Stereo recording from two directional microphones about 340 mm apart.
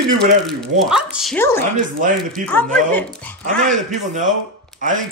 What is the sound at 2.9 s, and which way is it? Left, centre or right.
Speech, centre.